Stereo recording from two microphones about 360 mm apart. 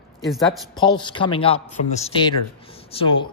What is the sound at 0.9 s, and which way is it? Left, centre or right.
A man's voice, centre.